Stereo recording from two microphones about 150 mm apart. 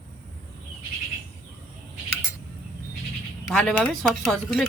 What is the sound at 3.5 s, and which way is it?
Speech, 10° left (ahead or behind).